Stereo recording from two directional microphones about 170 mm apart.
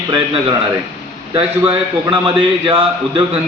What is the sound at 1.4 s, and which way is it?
A man's voice, 30° right (ahead or behind).